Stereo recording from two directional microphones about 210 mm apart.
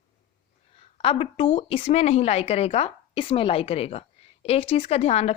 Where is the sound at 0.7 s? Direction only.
30° left (ahead or behind).